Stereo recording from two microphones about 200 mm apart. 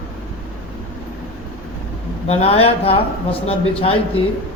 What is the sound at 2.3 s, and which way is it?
Speech, 30° left (ahead or behind).